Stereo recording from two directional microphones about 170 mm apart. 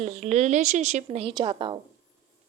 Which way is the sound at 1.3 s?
30° right (ahead or behind).